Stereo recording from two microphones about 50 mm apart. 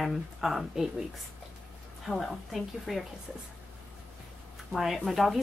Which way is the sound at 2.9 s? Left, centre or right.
Centre.